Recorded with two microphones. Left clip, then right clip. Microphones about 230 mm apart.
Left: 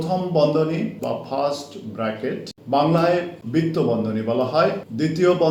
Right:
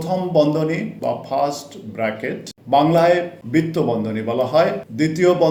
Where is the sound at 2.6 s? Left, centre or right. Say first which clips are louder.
Right 4 dB; right.